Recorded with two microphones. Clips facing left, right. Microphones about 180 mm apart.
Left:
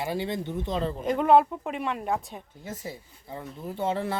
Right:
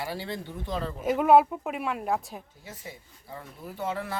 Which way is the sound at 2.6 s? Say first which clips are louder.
Left 6 dB; 35° left (ahead or behind).